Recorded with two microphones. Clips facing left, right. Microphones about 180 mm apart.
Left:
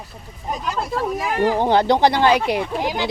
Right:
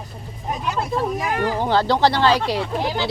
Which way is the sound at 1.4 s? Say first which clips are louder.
Left 4 dB; 15° left (ahead or behind).